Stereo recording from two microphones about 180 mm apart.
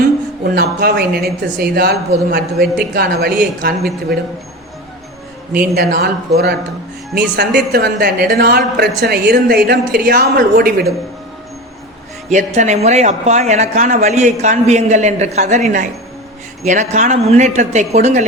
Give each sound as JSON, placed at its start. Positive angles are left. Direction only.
{"t": 0.5, "sound": "speech", "side_deg": -60}
{"t": 5.5, "sound": "speech", "side_deg": -60}
{"t": 12.3, "sound": "a man's voice", "side_deg": -40}
{"t": 16.6, "sound": "a man's voice", "side_deg": -40}